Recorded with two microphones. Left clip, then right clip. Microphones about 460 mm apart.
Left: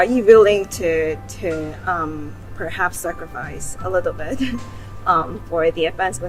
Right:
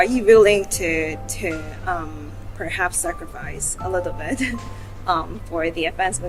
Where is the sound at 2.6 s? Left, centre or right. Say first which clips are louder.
Left 1 dB; right.